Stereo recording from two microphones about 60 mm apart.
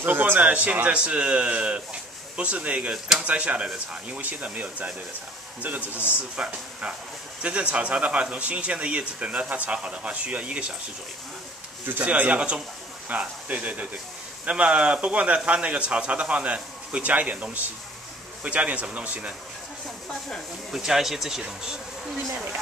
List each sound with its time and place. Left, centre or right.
0.0 s speech: right
12.0 s speech: right
20.1 s speech: centre
20.7 s speech: centre